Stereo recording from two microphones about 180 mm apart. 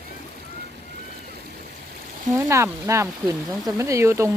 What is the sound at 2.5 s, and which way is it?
Speech, 15° right (ahead or behind).